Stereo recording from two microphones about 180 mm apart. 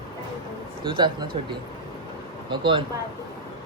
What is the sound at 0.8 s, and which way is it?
Speech, 25° right (ahead or behind).